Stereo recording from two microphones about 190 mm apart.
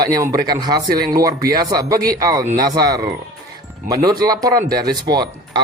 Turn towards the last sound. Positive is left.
turn(degrees=-20)  # may be behind; listen again after turning